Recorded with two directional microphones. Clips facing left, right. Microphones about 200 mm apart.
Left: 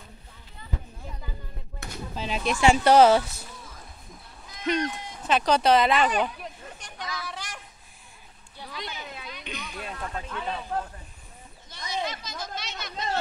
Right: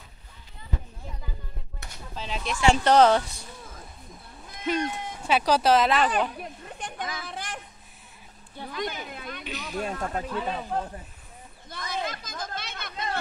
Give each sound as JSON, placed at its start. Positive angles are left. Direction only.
{"t": 2.1, "sound": "speech", "side_deg": 10}
{"t": 4.6, "sound": "speech", "side_deg": -5}
{"t": 6.8, "sound": "a sound", "side_deg": -55}
{"t": 9.7, "sound": "speech", "side_deg": -45}
{"t": 10.2, "sound": "speech", "side_deg": -5}
{"t": 11.9, "sound": "a sound", "side_deg": -50}